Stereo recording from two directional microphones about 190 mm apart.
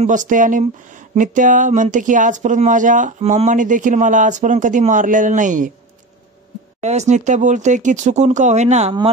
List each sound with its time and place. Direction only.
0.0 s speech: 40° right (ahead or behind)
6.8 s speech: 35° right (ahead or behind)